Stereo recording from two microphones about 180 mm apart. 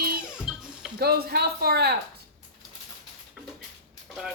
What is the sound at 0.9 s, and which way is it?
Speech, 60° right (ahead or behind).